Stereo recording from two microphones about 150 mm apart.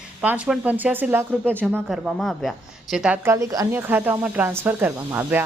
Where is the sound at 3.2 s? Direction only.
20° right (ahead or behind).